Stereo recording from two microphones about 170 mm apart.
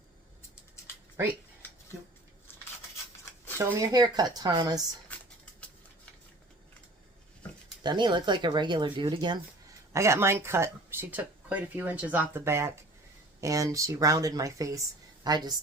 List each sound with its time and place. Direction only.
3.6 s speech: 20° right (ahead or behind)
5.1 s a sound: 10° left (ahead or behind)
7.9 s a woman's voice: 25° right (ahead or behind)